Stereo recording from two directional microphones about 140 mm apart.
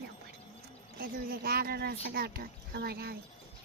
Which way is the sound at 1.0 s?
90° right.